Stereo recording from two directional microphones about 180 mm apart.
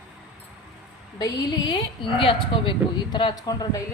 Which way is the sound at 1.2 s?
20° left (ahead or behind).